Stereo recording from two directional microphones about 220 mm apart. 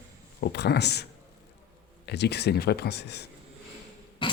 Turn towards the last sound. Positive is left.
turn(degrees=20)  # may be behind; listen again after turning